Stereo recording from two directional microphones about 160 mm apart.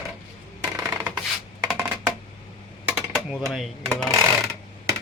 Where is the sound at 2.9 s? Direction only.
5° right (ahead or behind).